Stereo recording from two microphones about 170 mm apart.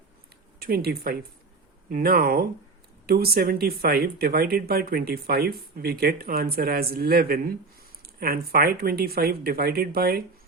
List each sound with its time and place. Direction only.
0.6 s speech: 65° right (ahead or behind)